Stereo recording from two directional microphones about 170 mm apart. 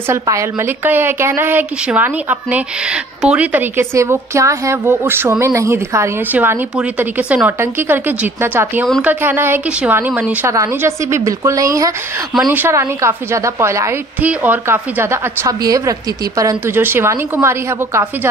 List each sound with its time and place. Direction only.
0.1 s a woman's voice: 15° right (ahead or behind)